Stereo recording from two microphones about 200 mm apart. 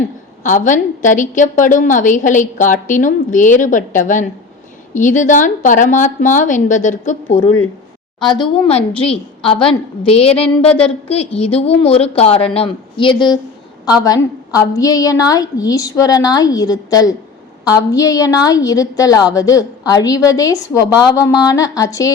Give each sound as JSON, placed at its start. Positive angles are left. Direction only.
{"t": 0.4, "sound": "a woman's voice", "side_deg": 40}
{"t": 9.0, "sound": "a woman's voice", "side_deg": 25}